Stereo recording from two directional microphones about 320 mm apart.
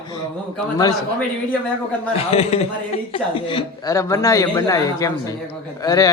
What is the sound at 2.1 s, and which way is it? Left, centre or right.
A man's voice, centre.